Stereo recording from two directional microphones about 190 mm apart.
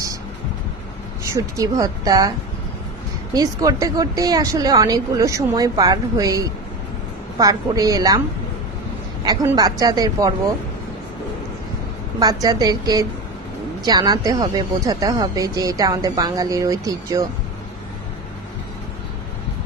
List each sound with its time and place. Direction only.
1.3 s a woman's voice: 20° right (ahead or behind)
3.3 s speech: 20° right (ahead or behind)
9.2 s speech: 20° right (ahead or behind)
12.2 s speech: 20° right (ahead or behind)